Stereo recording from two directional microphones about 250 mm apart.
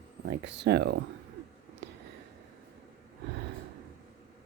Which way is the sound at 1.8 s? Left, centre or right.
Right.